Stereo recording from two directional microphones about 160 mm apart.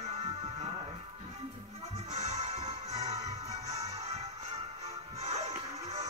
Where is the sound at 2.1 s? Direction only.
45° right (ahead or behind).